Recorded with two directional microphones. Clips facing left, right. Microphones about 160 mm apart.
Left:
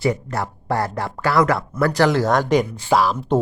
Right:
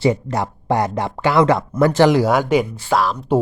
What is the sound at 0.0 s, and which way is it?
Speech, 20° right (ahead or behind).